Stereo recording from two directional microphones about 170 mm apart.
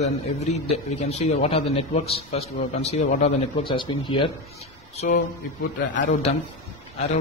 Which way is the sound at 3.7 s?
30° left (ahead or behind).